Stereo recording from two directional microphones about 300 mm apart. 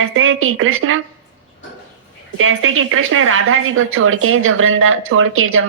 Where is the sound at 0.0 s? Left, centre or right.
Right.